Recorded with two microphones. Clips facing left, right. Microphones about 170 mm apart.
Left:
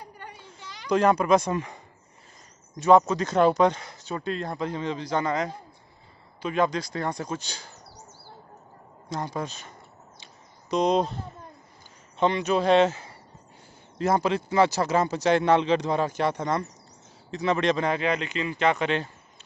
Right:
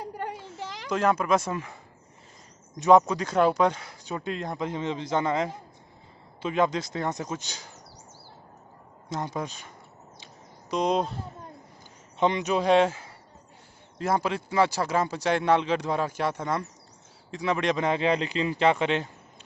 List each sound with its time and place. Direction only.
0.0 s a sound: 90° right
0.8 s speech: 5° right (ahead or behind)
3.0 s speech: 10° right (ahead or behind)
9.3 s speech: 15° right (ahead or behind)
10.2 s a sound: 5° right (ahead or behind)
12.2 s speech: 15° right (ahead or behind)